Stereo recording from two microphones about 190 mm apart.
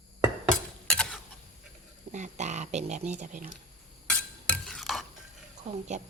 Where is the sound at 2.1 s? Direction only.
40° right (ahead or behind).